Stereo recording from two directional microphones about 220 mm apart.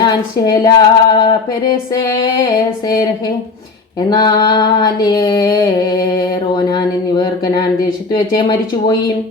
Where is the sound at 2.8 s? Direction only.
20° left (ahead or behind).